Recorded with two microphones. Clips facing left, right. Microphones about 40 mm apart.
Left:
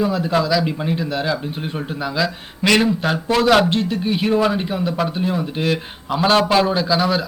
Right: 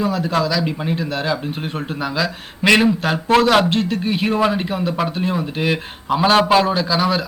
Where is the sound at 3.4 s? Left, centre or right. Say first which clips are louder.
Even; centre.